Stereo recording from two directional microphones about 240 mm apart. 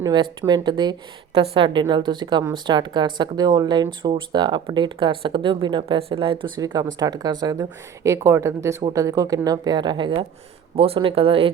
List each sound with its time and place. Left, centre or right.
0.0 s a woman's voice: centre